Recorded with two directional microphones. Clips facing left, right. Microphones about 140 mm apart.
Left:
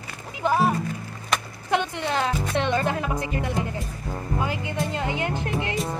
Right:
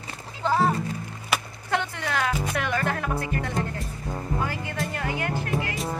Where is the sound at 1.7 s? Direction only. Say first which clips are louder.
Left 3 dB; 20° left (ahead or behind).